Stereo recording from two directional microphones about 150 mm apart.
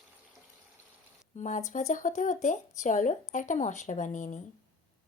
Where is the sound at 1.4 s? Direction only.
55° left (ahead or behind).